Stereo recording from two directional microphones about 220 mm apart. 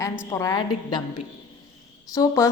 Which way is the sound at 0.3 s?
15° left (ahead or behind).